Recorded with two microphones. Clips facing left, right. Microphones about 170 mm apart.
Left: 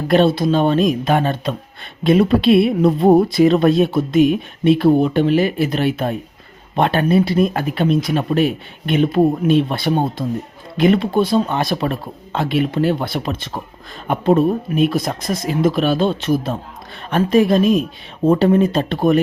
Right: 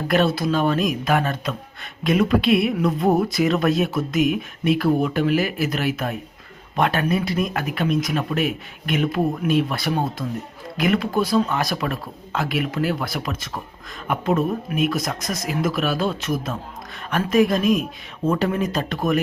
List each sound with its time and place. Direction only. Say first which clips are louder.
0.1 s speech: left 6 dB; 25° left (ahead or behind)